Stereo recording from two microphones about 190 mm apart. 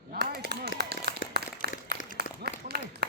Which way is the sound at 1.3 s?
55° right (ahead or behind).